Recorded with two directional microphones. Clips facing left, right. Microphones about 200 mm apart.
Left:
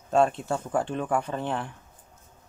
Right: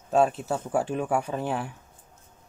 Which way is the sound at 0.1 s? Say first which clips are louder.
Even; 5° right (ahead or behind).